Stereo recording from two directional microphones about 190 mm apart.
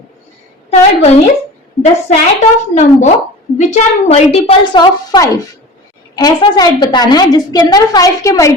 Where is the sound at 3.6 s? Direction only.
35° left (ahead or behind).